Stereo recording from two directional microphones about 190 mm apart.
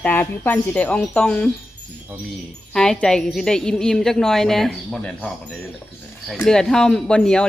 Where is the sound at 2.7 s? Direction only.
5° left (ahead or behind).